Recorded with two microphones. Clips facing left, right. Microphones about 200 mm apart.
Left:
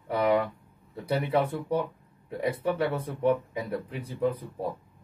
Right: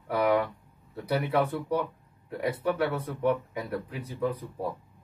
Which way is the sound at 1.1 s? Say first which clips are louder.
Even; 25° left (ahead or behind).